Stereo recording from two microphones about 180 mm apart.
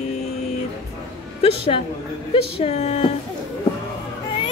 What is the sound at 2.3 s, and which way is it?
Speech, 35° left (ahead or behind).